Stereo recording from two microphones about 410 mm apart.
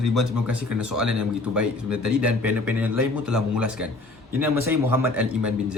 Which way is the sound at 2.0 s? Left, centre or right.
Right.